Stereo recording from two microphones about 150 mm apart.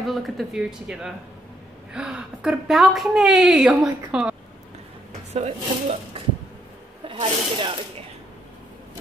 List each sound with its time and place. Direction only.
0.0 s a woman's voice: centre (ahead or behind)
5.3 s speech: 45° right (ahead or behind)
7.1 s speech: 30° right (ahead or behind)